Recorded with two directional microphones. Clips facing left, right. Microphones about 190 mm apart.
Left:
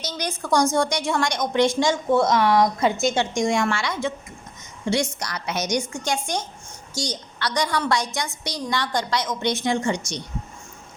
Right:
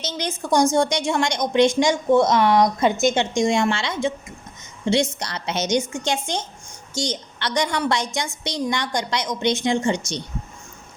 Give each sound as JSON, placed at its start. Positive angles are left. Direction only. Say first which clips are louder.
{"t": 0.0, "sound": "a woman's voice", "louder": "right 2 dB", "side_deg": -20}
{"t": 5.2, "sound": "a woman's voice", "louder": "right 2 dB", "side_deg": -25}